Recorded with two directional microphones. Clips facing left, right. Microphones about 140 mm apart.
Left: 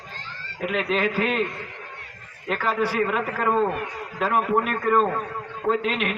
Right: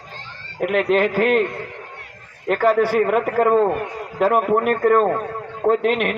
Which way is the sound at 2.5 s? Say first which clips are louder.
Right 8 dB; 50° right (ahead or behind).